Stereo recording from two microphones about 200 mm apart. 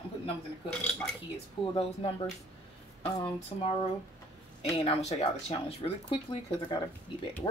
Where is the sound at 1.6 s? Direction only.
25° left (ahead or behind).